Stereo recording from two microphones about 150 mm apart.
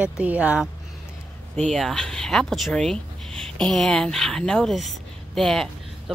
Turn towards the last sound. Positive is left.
turn(degrees=5)  # may be behind; listen again after turning